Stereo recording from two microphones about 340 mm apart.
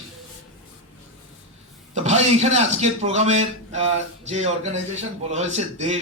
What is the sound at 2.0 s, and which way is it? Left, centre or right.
A man's voice, centre.